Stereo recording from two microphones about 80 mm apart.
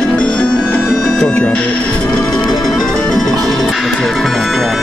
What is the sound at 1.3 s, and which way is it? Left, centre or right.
Music, centre.